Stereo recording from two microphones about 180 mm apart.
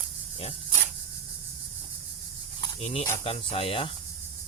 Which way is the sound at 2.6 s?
35° left (ahead or behind).